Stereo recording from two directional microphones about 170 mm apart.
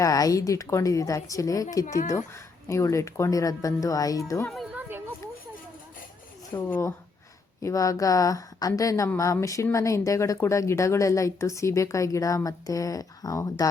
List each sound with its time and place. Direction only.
0.0 s speech: 20° left (ahead or behind)
4.4 s music: centre (ahead or behind)
6.6 s speech: 10° left (ahead or behind)